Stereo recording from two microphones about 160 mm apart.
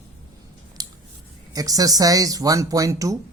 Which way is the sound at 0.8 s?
25° right (ahead or behind).